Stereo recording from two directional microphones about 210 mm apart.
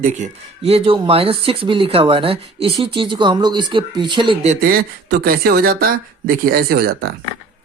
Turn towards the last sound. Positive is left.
turn(degrees=-50)  # may be behind; listen again after turning